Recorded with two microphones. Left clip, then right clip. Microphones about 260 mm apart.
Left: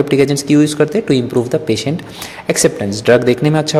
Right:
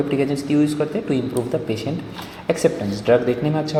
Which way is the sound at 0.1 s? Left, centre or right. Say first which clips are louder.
Left 8 dB; left.